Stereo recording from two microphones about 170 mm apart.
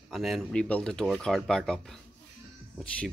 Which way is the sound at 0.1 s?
Centre (ahead or behind).